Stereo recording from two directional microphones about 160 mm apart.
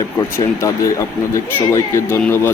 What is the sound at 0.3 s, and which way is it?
Speech, 20° left (ahead or behind).